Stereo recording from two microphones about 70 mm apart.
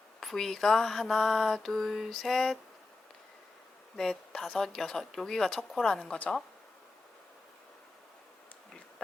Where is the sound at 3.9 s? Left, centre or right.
Centre.